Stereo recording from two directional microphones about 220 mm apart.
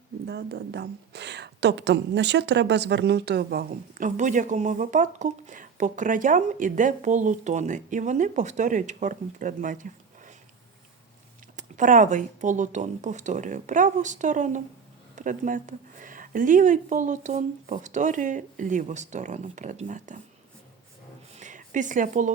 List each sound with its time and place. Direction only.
0.3 s a woman's voice: 50° right (ahead or behind)
11.5 s a woman's voice: 35° right (ahead or behind)
21.3 s a sound: 35° right (ahead or behind)